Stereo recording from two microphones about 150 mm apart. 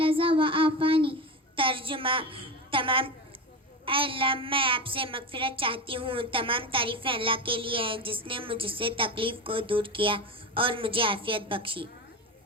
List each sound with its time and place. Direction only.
0.0 s child singing: 35° right (ahead or behind)
1.5 s a sound: 35° right (ahead or behind)
3.8 s a woman's voice: 35° right (ahead or behind)